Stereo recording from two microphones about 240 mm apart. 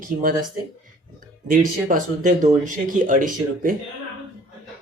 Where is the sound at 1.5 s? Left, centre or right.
Right.